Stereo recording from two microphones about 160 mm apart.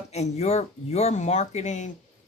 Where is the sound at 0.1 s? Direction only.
40° left (ahead or behind).